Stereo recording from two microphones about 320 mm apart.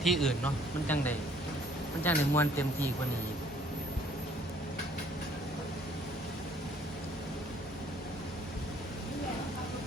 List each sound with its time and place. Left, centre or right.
0.0 s speech: centre